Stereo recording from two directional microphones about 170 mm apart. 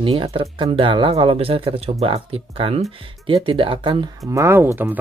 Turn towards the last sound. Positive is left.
turn(degrees=-10)  # may be behind; listen again after turning